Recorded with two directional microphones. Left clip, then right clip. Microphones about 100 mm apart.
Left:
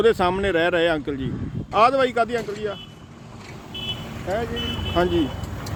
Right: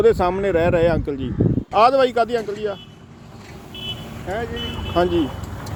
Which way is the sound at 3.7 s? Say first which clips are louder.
Even; 35° right (ahead or behind).